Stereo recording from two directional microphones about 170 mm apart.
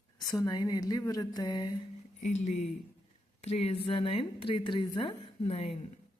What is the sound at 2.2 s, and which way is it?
Speech, 45° left (ahead or behind).